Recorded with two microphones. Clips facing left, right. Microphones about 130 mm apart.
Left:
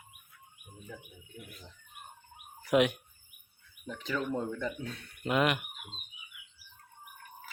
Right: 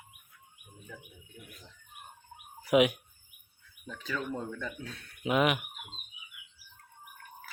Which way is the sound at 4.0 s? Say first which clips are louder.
Left 2 dB; 15° left (ahead or behind).